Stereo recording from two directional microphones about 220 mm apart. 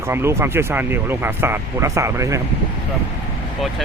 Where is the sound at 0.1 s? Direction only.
10° right (ahead or behind).